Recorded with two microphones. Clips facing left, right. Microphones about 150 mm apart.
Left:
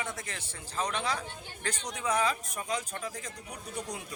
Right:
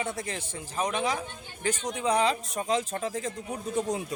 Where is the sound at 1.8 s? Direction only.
25° right (ahead or behind).